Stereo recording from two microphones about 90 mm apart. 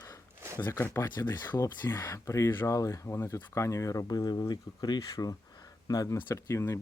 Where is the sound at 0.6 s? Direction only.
25° left (ahead or behind).